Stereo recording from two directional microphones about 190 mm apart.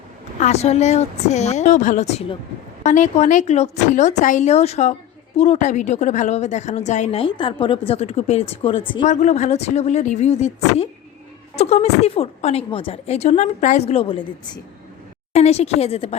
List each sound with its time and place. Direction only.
0.3 s a woman's voice: 35° left (ahead or behind)